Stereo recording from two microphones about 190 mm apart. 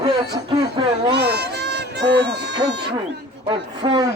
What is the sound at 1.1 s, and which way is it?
Speech, 60° right (ahead or behind).